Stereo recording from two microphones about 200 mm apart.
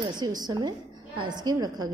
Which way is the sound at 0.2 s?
20° right (ahead or behind).